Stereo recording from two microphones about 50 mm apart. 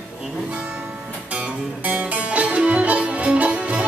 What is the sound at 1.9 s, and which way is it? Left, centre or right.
Music, right.